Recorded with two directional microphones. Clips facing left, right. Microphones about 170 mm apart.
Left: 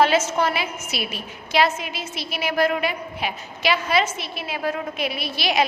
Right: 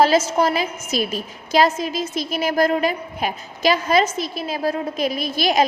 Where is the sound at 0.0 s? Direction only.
35° right (ahead or behind).